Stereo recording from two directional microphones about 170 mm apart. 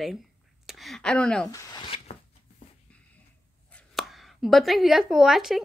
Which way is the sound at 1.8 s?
35° left (ahead or behind).